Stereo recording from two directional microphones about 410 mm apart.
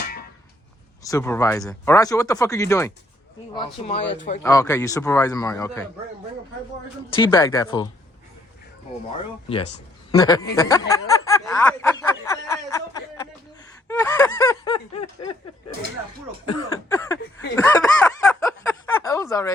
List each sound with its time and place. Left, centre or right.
1.0 s speech: centre
4.0 s speech: left
4.4 s speech: centre
7.2 s speech: centre
9.1 s a man's voice: centre
10.5 s a sound: centre
13.8 s snicker: centre
16.5 s speech: centre
17.5 s snicker: centre
18.9 s speech: centre